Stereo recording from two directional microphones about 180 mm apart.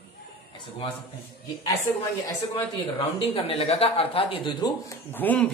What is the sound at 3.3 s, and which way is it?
Speech, 35° left (ahead or behind).